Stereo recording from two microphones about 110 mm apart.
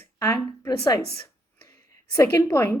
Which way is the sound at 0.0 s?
25° left (ahead or behind).